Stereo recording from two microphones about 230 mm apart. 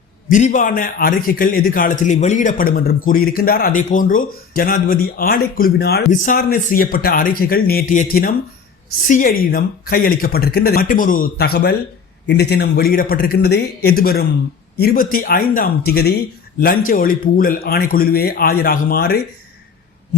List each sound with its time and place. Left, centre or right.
0.3 s a man's voice: left